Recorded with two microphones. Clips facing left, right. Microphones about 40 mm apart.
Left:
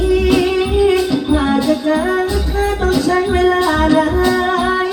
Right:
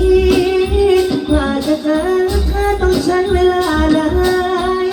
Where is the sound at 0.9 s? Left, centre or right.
Centre.